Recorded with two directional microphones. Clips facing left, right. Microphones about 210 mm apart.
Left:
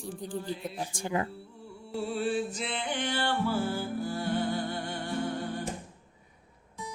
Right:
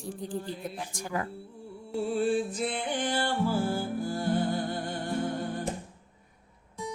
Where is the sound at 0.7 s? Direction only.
25° left (ahead or behind).